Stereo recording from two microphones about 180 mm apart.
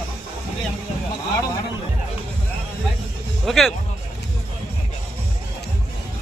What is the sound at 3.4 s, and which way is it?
Speech, centre (ahead or behind).